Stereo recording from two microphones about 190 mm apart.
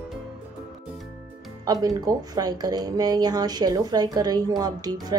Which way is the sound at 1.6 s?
20° right (ahead or behind).